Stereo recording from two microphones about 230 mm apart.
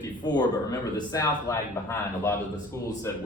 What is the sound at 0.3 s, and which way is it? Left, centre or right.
Speech, centre.